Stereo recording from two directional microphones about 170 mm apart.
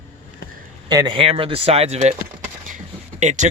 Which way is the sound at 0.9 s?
25° right (ahead or behind).